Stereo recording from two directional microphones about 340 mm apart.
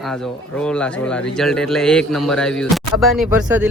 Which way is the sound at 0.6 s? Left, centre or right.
Centre.